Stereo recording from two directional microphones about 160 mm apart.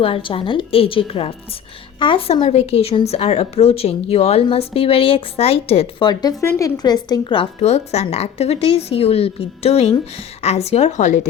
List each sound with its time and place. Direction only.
0.0 s a woman's voice: 35° left (ahead or behind)
7.6 s a woman's voice: 40° left (ahead or behind)